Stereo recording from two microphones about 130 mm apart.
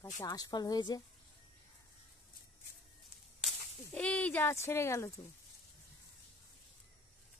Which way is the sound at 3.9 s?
10° left (ahead or behind).